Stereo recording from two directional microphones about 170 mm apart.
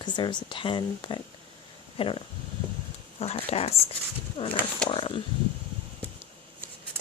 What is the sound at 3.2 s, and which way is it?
Speech, 35° left (ahead or behind).